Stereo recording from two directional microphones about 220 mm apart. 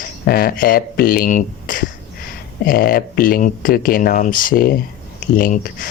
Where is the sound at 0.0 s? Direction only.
45° left (ahead or behind).